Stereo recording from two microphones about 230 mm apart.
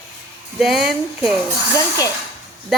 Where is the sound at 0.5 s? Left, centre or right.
Centre.